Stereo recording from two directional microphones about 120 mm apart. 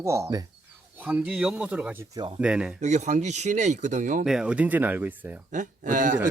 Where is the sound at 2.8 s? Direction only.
75° right (ahead or behind); by 4.2 s 90° right.